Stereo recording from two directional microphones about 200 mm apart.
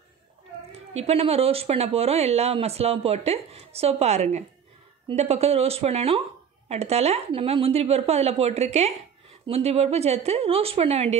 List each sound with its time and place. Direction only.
0.9 s speech: 30° right (ahead or behind)